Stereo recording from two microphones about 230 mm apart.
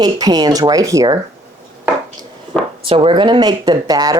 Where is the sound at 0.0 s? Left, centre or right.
Centre.